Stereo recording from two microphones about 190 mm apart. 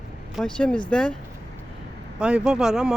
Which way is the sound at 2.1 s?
5° right (ahead or behind).